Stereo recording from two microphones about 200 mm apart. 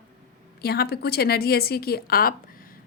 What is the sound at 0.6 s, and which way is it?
A woman's voice, 50° left (ahead or behind).